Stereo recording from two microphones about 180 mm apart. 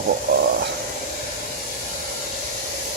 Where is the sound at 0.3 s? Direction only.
55° right (ahead or behind).